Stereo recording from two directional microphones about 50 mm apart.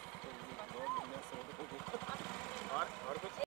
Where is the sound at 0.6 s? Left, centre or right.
Left.